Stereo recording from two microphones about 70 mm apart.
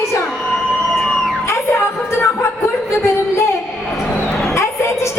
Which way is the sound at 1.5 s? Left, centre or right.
Left.